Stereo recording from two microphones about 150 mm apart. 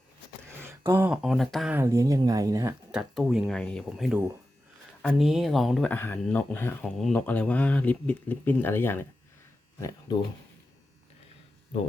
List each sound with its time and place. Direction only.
0.9 s speech: 10° right (ahead or behind)
1.7 s speech: 20° right (ahead or behind)
2.9 s speech: 5° right (ahead or behind)
5.9 s speech: 15° left (ahead or behind)